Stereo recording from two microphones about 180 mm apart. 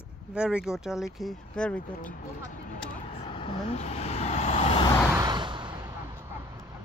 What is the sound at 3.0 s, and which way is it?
Vehicle, 30° left (ahead or behind).